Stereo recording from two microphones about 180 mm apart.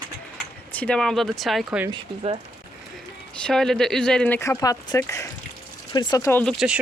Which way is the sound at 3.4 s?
Centre (ahead or behind).